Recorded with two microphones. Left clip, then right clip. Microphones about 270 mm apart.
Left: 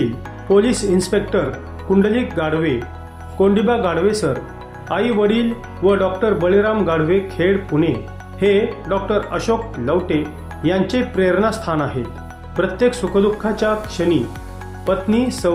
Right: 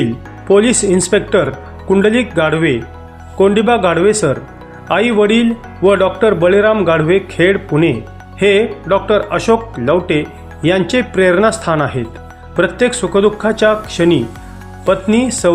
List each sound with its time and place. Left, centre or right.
0.4 s speech: right